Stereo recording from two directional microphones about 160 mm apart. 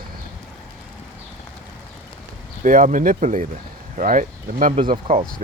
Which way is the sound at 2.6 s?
55° right (ahead or behind).